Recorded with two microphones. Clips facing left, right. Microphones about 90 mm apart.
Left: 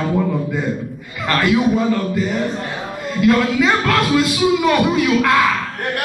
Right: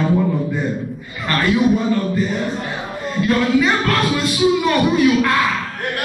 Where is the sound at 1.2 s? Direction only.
85° left.